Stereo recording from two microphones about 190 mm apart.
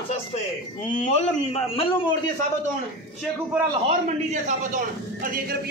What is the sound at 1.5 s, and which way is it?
Speech, 30° left (ahead or behind).